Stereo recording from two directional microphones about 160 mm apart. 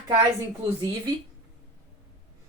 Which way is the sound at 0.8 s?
25° right (ahead or behind).